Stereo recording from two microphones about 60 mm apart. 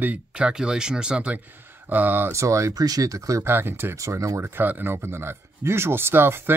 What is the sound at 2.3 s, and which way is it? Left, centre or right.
Speech, right.